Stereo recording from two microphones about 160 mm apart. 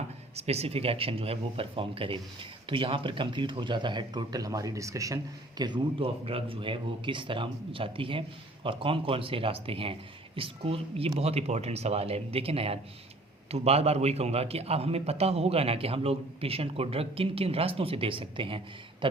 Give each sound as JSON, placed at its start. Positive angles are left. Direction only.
{"t": 0.3, "sound": "speech", "side_deg": -40}